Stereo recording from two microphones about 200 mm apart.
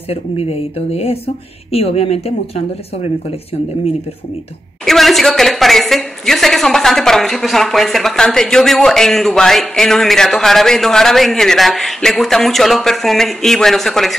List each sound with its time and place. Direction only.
0.1 s speech: 30° left (ahead or behind)
4.8 s a woman's voice: centre (ahead or behind)